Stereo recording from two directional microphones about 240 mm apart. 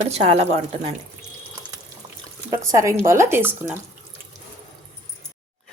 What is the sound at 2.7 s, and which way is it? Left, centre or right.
Speech, centre.